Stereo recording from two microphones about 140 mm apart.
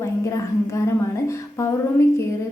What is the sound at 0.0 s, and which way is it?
A woman's voice, 20° left (ahead or behind).